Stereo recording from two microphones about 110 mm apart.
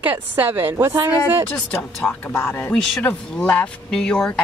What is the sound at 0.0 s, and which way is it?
A woman's voice, 15° right (ahead or behind).